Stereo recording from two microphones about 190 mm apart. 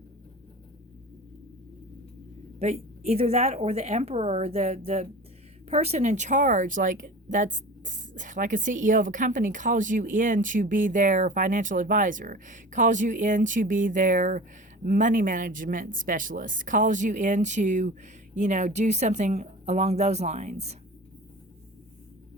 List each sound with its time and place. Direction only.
2.6 s speech: 35° right (ahead or behind)